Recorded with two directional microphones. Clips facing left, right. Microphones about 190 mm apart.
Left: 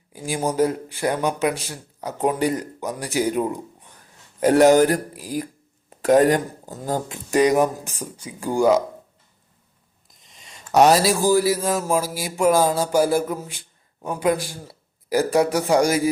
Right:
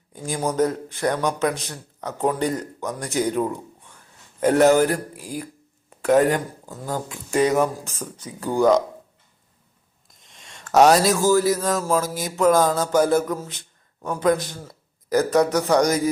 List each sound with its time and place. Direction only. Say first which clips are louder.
0.1 s speech: left 1 dB; 10° left (ahead or behind)
6.1 s speech: left 2 dB; 40° left (ahead or behind)
6.9 s speech: left 2 dB; 20° left (ahead or behind)
10.1 s speech: right 1 dB; centre (ahead or behind)
14.4 s a sound: even; 10° left (ahead or behind)
15.3 s speech: even; 15° left (ahead or behind)